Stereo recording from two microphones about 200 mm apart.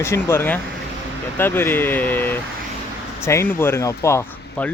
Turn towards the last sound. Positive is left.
turn(degrees=10)  # may be behind; listen again after turning